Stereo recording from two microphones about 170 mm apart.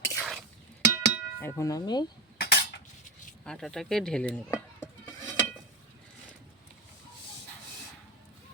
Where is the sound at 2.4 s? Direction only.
75° left (ahead or behind).